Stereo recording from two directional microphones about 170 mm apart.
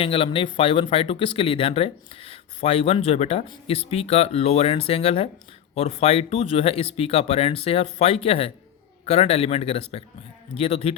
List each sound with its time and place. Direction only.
0.0 s speech: 35° left (ahead or behind)